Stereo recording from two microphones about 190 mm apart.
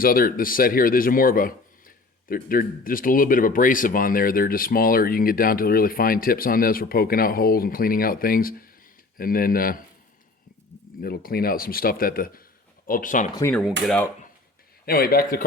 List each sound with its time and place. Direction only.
0.0 s speech: 50° left (ahead or behind)
11.0 s speech: 50° left (ahead or behind)
13.5 s speech: centre (ahead or behind)
14.8 s speech: 50° left (ahead or behind)